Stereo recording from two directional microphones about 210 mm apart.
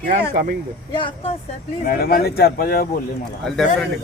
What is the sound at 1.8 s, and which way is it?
Speech, 45° left (ahead or behind).